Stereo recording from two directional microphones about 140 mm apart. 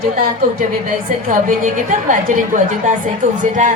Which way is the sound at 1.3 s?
75° right (ahead or behind).